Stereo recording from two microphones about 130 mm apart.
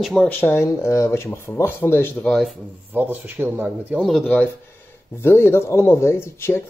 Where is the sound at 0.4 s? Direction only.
20° left (ahead or behind).